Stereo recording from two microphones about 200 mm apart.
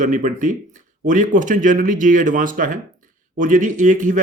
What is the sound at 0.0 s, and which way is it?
Speech, 40° right (ahead or behind).